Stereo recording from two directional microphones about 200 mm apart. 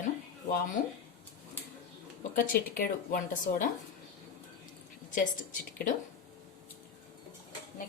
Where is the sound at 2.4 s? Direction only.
45° left (ahead or behind).